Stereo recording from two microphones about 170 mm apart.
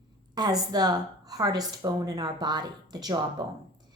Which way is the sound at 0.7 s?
20° right (ahead or behind).